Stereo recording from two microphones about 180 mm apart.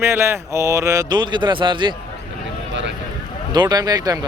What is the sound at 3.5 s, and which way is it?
Speech, 20° right (ahead or behind).